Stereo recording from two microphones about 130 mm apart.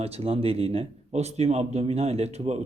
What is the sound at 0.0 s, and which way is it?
Speech, 50° right (ahead or behind).